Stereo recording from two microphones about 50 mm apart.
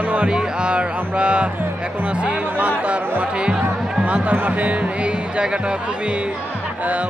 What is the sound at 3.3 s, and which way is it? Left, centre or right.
Speech, right.